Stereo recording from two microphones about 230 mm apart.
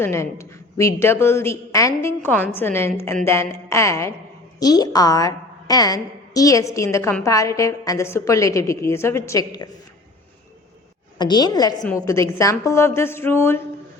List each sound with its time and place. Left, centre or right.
0.0 s a woman's voice: centre
11.2 s a woman's voice: centre